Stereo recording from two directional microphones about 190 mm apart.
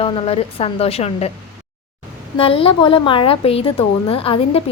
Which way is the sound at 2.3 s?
30° left (ahead or behind).